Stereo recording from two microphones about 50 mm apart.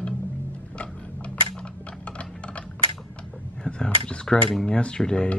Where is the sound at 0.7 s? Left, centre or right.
Left.